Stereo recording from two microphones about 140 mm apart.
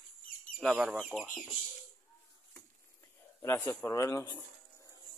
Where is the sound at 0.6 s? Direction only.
Centre (ahead or behind).